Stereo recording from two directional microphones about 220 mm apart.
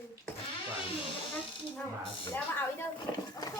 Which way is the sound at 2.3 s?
10° left (ahead or behind).